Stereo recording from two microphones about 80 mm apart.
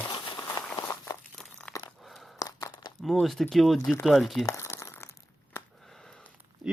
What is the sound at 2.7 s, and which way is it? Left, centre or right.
Crumpling, left.